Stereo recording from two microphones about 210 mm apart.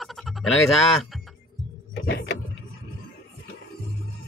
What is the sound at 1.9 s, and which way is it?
Vehicle, 50° left (ahead or behind).